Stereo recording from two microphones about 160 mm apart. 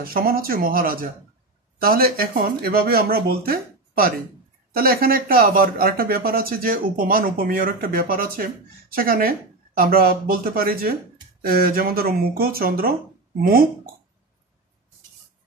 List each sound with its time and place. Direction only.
0.0 s speech: 65° right (ahead or behind)